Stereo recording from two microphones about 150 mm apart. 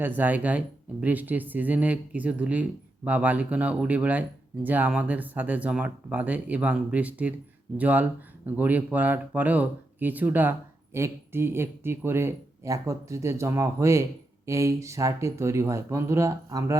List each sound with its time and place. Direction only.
0.0 s speech: 10° right (ahead or behind)